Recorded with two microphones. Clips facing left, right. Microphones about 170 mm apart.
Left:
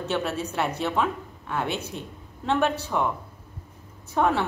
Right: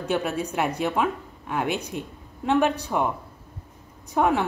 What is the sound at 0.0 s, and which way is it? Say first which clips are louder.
A woman's voice: right 2 dB; 15° right (ahead or behind).